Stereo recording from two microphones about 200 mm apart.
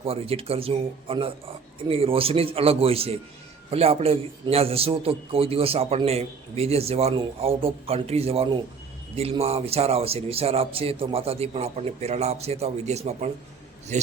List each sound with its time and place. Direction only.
0.0 s a man's voice: 30° right (ahead or behind)